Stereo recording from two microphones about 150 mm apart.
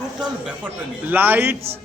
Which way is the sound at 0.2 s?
10° right (ahead or behind).